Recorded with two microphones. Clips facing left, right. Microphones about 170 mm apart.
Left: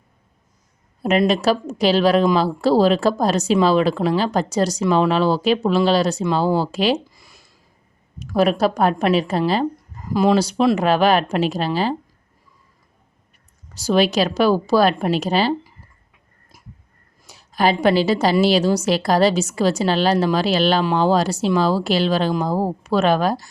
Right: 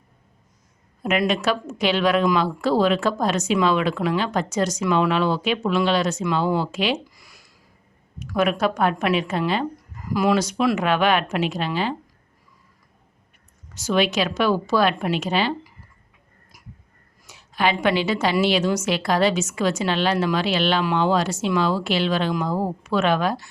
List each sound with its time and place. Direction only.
1.0 s a woman's voice: 35° left (ahead or behind)
7.1 s a sound: 25° left (ahead or behind)
8.2 s a woman's voice: 35° left (ahead or behind)
13.7 s a woman's voice: 35° left (ahead or behind)
17.2 s a woman's voice: 35° left (ahead or behind)